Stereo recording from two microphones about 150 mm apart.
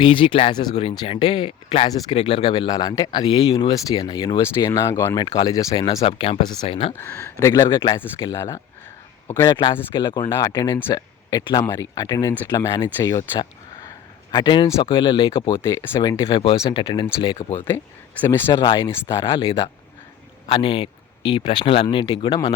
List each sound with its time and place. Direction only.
0.0 s a man's voice: 35° left (ahead or behind)
0.8 s a man's voice: 40° left (ahead or behind); by 5.6 s 20° left (ahead or behind)
5.7 s a man's voice: 35° left (ahead or behind)
6.9 s speech: 15° left (ahead or behind)
14.3 s a man's voice: 30° left (ahead or behind)
15.6 s speech: 15° left (ahead or behind)
16.0 s a man's voice: 30° left (ahead or behind)
18.2 s speech: 15° left (ahead or behind)
18.5 s speech: 30° left (ahead or behind)
18.9 s speech: 15° left (ahead or behind)
19.2 s a man's voice: 35° left (ahead or behind)